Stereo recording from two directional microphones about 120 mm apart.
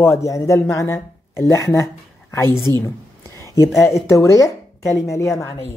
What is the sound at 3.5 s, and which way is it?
A man's voice, 25° left (ahead or behind).